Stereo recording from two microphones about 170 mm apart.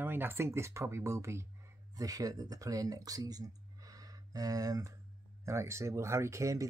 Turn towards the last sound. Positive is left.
turn(degrees=-20)  # may be behind; listen again after turning